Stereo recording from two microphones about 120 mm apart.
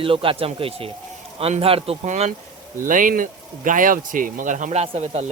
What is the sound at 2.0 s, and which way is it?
Speech, 70° right (ahead or behind).